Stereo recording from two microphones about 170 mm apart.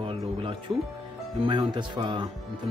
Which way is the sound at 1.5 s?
25° right (ahead or behind).